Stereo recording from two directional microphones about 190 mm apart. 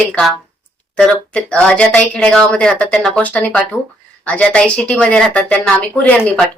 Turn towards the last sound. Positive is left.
turn(degrees=5)  # may be behind; listen again after turning